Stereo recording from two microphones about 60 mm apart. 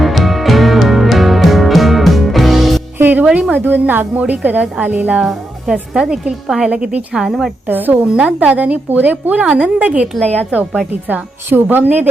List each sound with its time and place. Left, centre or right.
0.0 s music: centre
3.0 s music: right
3.5 s a woman's voice: right
5.2 s music: centre
5.7 s a woman's voice: centre
7.7 s a woman's voice: right
8.0 s a woman's voice: centre
11.1 s a woman's voice: right